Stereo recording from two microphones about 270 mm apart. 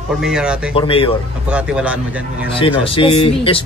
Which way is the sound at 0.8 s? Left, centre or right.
Centre.